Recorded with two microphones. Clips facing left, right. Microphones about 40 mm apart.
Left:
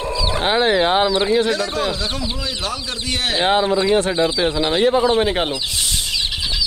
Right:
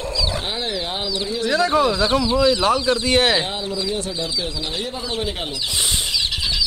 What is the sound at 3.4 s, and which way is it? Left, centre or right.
Speech, left.